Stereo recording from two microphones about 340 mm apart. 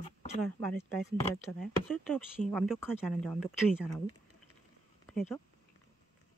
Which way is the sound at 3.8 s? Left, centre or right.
Centre.